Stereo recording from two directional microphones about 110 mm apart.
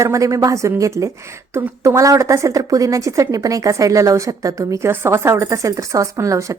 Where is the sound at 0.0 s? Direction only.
30° right (ahead or behind).